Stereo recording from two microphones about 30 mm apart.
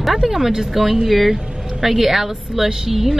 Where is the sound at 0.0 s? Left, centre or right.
Centre.